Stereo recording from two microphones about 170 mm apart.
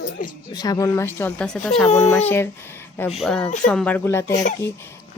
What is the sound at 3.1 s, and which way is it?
A woman's voice, centre (ahead or behind).